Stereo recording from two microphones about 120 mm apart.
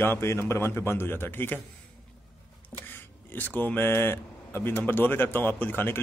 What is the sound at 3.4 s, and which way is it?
Speech, 15° left (ahead or behind).